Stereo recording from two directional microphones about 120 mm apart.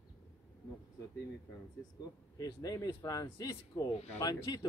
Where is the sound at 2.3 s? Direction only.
30° left (ahead or behind).